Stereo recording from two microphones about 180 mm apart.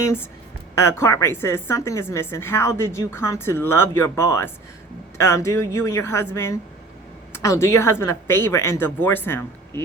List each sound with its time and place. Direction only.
0.0 s a woman's voice: 15° left (ahead or behind)